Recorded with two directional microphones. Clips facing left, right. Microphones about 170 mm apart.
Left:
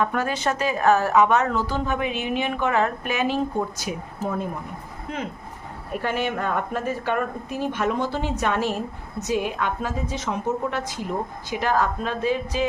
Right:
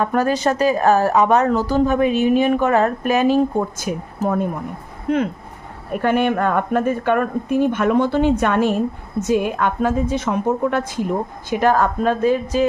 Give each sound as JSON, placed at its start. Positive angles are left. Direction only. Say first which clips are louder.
{"t": 0.0, "sound": "a woman's voice", "louder": "right 6 dB", "side_deg": -40}
{"t": 3.8, "sound": "a woman's voice", "louder": "right 6 dB", "side_deg": -50}
{"t": 5.9, "sound": "a woman's voice", "louder": "right 8 dB", "side_deg": -55}